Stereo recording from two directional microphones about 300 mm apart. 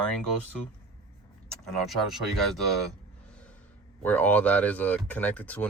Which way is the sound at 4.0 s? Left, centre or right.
Centre.